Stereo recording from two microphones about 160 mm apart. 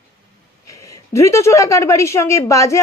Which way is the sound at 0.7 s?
20° left (ahead or behind).